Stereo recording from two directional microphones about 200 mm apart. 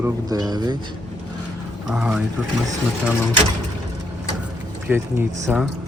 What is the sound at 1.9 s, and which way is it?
Speech, 5° right (ahead or behind).